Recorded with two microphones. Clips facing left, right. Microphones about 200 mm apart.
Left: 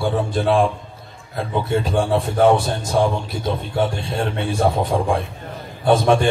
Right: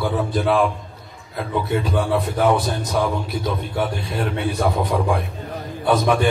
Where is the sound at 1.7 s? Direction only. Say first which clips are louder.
Left 2 dB; 25° left (ahead or behind).